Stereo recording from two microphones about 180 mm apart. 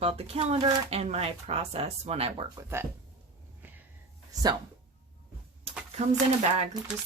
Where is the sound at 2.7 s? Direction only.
15° right (ahead or behind).